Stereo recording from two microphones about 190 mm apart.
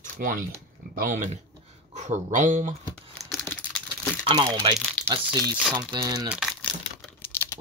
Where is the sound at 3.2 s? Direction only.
5° left (ahead or behind).